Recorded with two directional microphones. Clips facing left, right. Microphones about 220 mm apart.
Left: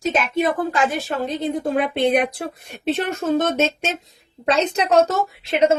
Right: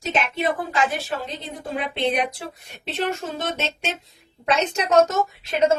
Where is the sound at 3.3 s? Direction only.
50° left (ahead or behind).